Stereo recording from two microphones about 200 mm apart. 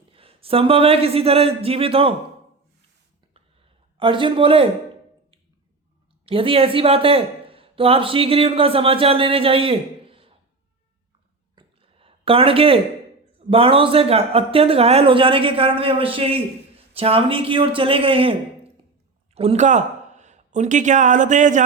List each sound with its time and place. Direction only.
0.1 s speech: 30° right (ahead or behind)
3.9 s a man's voice: 25° right (ahead or behind)
6.2 s speech: 25° right (ahead or behind)
11.5 s a sound: 25° right (ahead or behind)
13.5 s a man's voice: 25° right (ahead or behind)